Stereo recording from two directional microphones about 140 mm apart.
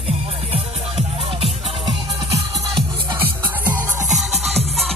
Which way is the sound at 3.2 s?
15° right (ahead or behind).